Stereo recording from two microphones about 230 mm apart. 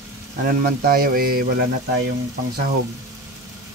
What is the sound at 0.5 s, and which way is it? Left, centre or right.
Speech, right.